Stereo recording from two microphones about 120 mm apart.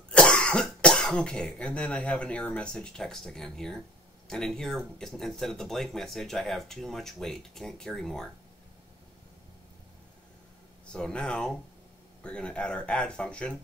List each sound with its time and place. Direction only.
0.1 s speech: 10° left (ahead or behind)
10.9 s speech: 5° left (ahead or behind)